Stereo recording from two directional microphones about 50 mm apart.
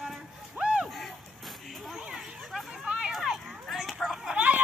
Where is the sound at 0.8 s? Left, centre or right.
Centre.